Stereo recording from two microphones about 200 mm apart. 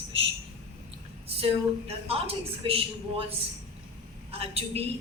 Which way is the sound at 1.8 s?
30° right (ahead or behind).